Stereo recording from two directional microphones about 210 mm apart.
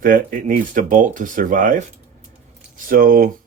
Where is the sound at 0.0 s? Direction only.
40° right (ahead or behind).